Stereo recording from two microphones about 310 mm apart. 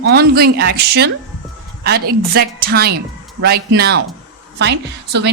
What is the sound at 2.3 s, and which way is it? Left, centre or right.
Speech, right.